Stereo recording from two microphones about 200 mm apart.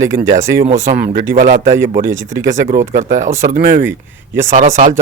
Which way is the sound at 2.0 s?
15° right (ahead or behind).